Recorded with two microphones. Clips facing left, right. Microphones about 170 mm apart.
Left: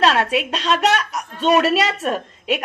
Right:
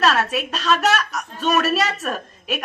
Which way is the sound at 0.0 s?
25° left (ahead or behind).